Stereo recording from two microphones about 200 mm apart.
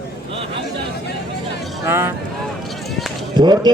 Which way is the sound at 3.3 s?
20° right (ahead or behind).